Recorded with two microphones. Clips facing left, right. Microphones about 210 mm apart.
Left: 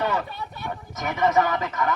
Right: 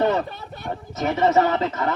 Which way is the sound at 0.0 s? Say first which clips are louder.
Right 5 dB; 30° right (ahead or behind).